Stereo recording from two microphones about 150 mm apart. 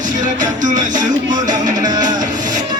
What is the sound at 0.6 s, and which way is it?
Music, 60° right (ahead or behind).